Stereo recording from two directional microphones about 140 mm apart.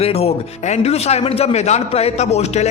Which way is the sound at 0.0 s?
45° left (ahead or behind).